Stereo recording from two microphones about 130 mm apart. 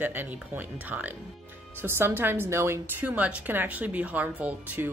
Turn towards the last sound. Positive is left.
turn(degrees=-15)  # may be behind; listen again after turning